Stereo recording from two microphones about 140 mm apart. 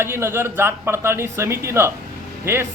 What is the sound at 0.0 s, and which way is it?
A man's voice, 15° right (ahead or behind).